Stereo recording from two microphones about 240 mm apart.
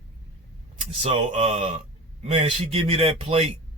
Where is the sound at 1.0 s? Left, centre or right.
Right.